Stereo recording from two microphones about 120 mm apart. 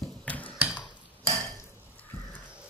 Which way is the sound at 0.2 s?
10° left (ahead or behind).